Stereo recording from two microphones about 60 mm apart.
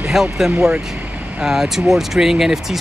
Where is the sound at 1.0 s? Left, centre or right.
Right.